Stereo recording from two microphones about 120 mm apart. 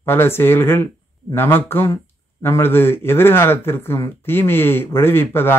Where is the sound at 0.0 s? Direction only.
20° left (ahead or behind).